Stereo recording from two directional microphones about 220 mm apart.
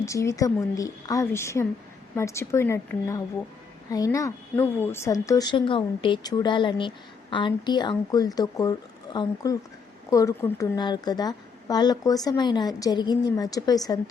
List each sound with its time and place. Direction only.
0.0 s a woman's voice: 15° left (ahead or behind)